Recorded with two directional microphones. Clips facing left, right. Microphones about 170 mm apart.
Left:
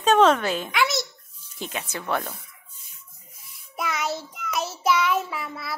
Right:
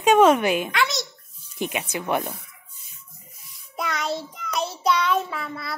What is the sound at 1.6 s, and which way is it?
Speech, 15° right (ahead or behind).